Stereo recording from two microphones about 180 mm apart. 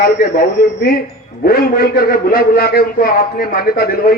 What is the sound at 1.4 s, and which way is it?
A man's voice, 55° left (ahead or behind).